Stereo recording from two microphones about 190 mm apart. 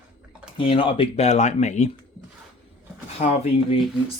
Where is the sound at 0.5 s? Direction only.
30° left (ahead or behind).